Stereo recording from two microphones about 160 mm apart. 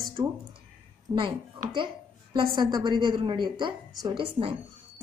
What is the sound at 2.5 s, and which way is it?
A woman's voice, 25° right (ahead or behind).